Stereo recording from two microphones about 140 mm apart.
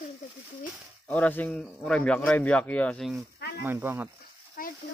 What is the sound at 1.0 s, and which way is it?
Speech, 10° left (ahead or behind).